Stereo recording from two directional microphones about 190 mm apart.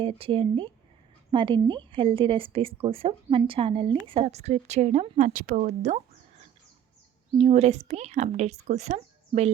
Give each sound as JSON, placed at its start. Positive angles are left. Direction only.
{"t": 0.0, "sound": "a woman's voice", "side_deg": -30}